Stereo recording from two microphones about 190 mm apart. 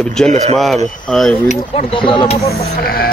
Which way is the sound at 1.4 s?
30° left (ahead or behind).